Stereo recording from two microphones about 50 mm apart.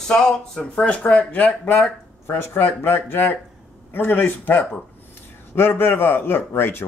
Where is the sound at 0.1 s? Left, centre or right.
Centre.